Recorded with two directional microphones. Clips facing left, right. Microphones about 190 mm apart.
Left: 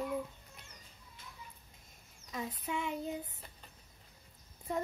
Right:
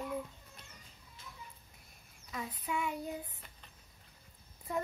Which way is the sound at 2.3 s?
20° left (ahead or behind).